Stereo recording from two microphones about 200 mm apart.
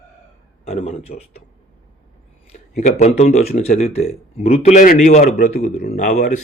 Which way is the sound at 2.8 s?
35° left (ahead or behind).